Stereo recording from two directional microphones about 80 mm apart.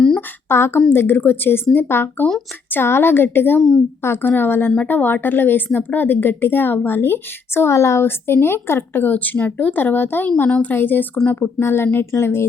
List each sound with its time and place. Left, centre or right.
0.4 s a woman's voice: left